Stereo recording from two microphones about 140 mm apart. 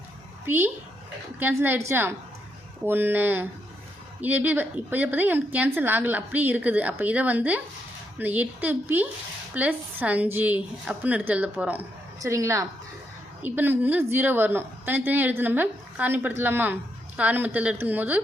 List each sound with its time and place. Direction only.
0.4 s a woman's voice: 15° right (ahead or behind)
12.2 s a woman's voice: 25° right (ahead or behind)